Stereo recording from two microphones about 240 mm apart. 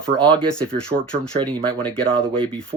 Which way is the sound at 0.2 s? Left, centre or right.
Centre.